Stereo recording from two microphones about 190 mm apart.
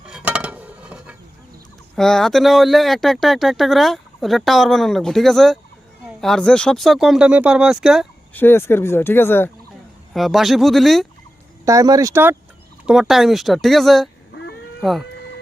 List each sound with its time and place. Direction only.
0.0 s a sound: 5° right (ahead or behind)
2.0 s speech: 5° left (ahead or behind)
8.3 s speech: 10° left (ahead or behind)
10.2 s speech: centre (ahead or behind)
11.6 s speech: 15° right (ahead or behind); by 15.0 s centre (ahead or behind)